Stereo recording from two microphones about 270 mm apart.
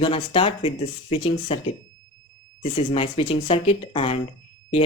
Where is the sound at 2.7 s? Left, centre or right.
Centre.